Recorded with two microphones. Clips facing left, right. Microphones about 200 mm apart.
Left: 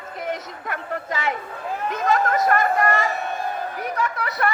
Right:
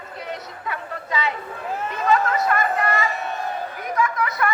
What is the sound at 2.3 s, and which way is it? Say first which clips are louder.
Chatter: left 2 dB; 45° left (ahead or behind).